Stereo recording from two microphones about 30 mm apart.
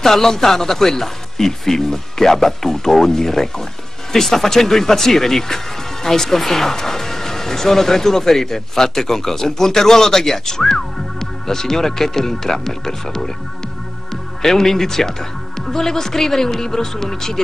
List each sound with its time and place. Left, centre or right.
0.0 s speech: centre
14.4 s speech: centre